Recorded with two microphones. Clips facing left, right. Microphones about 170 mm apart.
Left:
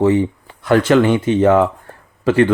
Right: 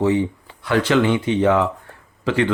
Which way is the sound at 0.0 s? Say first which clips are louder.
Left 4 dB; 50° left (ahead or behind).